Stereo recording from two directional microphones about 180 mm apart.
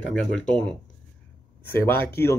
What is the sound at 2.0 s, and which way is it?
Speech, 15° left (ahead or behind).